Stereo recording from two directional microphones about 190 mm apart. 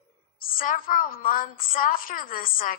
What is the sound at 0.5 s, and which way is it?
A woman's voice, 45° left (ahead or behind).